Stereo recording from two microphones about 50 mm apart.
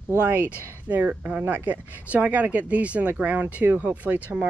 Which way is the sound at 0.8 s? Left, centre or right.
Right.